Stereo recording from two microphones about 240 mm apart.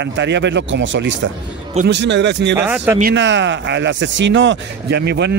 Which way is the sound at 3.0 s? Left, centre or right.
Right.